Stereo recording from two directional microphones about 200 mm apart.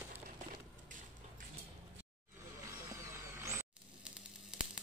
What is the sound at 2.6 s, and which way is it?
Vehicle, 15° right (ahead or behind).